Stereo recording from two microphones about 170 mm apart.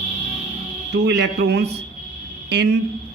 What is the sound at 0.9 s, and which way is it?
A man's voice, 85° right.